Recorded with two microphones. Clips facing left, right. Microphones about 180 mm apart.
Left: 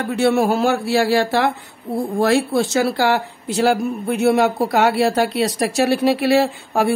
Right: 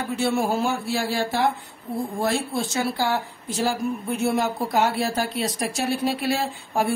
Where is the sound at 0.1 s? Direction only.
70° left (ahead or behind).